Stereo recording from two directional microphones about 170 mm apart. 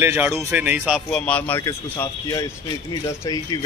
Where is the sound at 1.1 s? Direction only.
5° left (ahead or behind).